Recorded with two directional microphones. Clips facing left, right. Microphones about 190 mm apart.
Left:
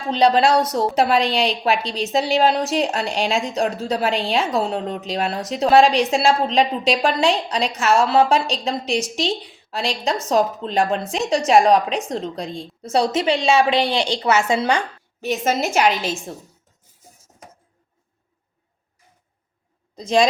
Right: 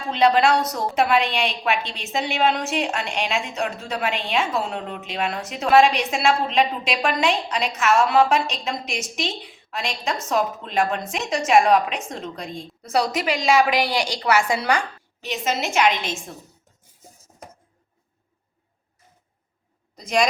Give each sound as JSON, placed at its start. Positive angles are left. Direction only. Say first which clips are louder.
{"t": 0.1, "sound": "a woman's voice", "louder": "left 2 dB", "side_deg": 30}
{"t": 15.2, "sound": "a woman's voice", "louder": "left 5 dB", "side_deg": 45}
{"t": 20.0, "sound": "speech", "louder": "left 4 dB", "side_deg": 30}